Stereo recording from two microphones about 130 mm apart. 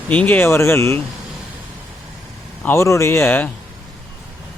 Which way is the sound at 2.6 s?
20° left (ahead or behind).